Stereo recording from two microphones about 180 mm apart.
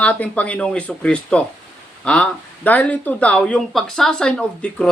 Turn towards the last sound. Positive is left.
turn(degrees=5)  # may be behind; listen again after turning